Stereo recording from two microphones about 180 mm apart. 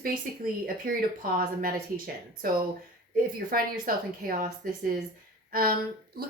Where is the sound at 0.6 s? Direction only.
55° right (ahead or behind).